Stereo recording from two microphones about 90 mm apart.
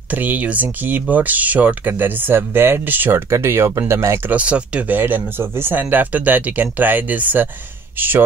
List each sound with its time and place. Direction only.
0.1 s speech: 20° right (ahead or behind)
4.3 s speech: 15° right (ahead or behind)